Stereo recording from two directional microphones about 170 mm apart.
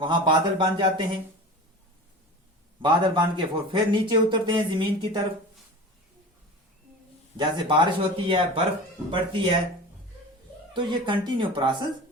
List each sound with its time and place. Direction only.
0.0 s speech: 30° right (ahead or behind)
2.8 s speech: 25° right (ahead or behind)
7.3 s speech: 30° right (ahead or behind)
10.8 s speech: 25° right (ahead or behind)